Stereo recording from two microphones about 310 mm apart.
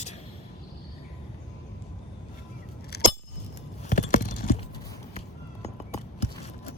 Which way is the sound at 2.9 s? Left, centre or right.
Left.